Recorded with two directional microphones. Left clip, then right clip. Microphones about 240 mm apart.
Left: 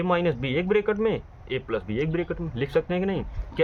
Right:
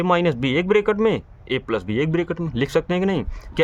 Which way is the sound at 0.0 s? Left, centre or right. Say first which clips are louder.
Right 5 dB; right.